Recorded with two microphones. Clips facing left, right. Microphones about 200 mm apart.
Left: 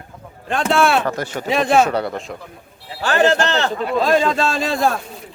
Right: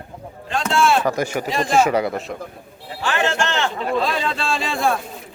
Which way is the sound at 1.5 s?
65° left (ahead or behind).